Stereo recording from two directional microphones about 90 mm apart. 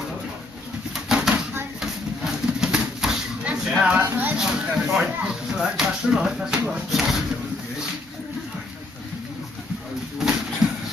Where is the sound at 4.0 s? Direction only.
25° right (ahead or behind).